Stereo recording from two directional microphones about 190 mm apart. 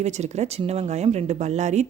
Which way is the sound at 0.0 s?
35° right (ahead or behind).